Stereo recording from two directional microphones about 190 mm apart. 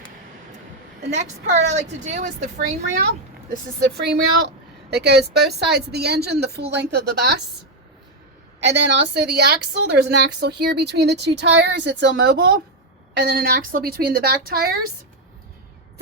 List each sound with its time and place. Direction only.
1.1 s a woman's voice: 40° right (ahead or behind)
3.5 s a woman's voice: 60° right (ahead or behind)
8.6 s a woman's voice: 65° right (ahead or behind)